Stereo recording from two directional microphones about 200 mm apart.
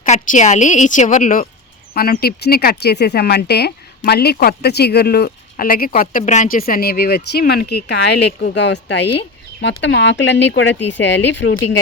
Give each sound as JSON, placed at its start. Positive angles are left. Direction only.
{"t": 0.0, "sound": "a woman's voice", "side_deg": 35}